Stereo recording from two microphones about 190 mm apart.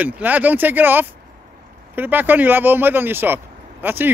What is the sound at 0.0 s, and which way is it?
Speech, 10° right (ahead or behind).